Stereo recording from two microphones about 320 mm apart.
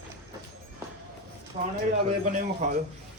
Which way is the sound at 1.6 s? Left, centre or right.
Right.